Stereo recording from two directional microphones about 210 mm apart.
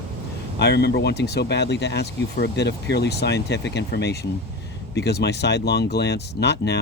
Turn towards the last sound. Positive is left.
turn(degrees=55)  # may be behind; listen again after turning